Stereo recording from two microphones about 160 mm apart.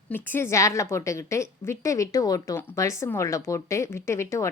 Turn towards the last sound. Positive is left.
turn(degrees=15)  # may be behind; listen again after turning